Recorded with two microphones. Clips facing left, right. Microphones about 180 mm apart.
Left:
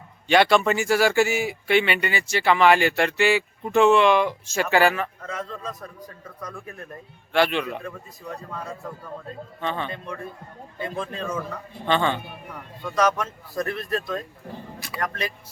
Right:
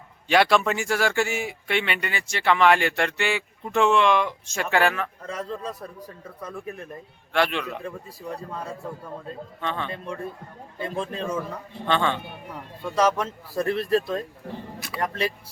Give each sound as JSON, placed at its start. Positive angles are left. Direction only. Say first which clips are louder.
{"t": 0.3, "sound": "speech", "louder": "left 2 dB", "side_deg": 0}
{"t": 5.2, "sound": "speech", "louder": "right 1 dB", "side_deg": -35}
{"t": 7.3, "sound": "speech", "louder": "left 3 dB", "side_deg": 0}
{"t": 7.9, "sound": "speech", "louder": "right 2 dB", "side_deg": -30}
{"t": 9.6, "sound": "speech", "louder": "left 2 dB", "side_deg": 0}
{"t": 10.8, "sound": "speech", "louder": "right 1 dB", "side_deg": -30}
{"t": 11.9, "sound": "speech", "louder": "left 1 dB", "side_deg": 0}
{"t": 12.8, "sound": "speech", "louder": "even", "side_deg": -30}
{"t": 14.8, "sound": "speech", "louder": "right 1 dB", "side_deg": 0}
{"t": 15.0, "sound": "speech", "louder": "right 2 dB", "side_deg": -30}